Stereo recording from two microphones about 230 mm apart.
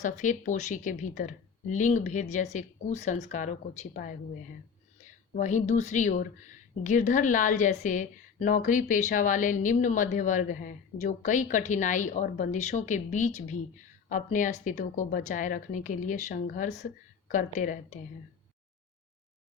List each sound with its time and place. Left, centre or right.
0.0 s speech: left
5.3 s speech: left